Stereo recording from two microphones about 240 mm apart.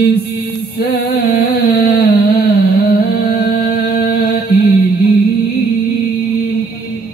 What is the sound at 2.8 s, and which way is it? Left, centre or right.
Music, left.